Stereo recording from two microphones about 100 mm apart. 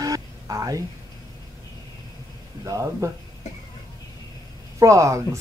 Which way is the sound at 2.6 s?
30° right (ahead or behind).